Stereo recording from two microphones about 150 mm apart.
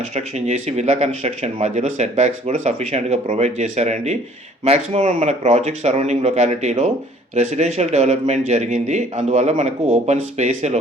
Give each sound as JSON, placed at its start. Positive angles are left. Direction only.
{"t": 0.1, "sound": "speech", "side_deg": -50}